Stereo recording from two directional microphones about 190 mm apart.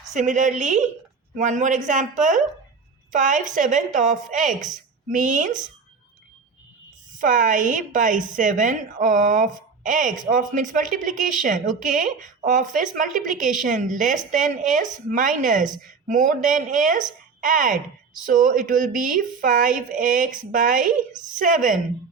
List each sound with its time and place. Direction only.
0.1 s a woman's voice: 40° right (ahead or behind)
7.2 s speech: 45° right (ahead or behind)